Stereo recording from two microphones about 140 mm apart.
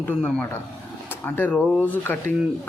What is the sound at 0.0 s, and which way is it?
Speech, 10° left (ahead or behind).